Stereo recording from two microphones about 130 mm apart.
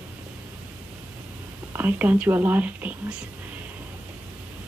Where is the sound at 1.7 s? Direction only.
15° right (ahead or behind).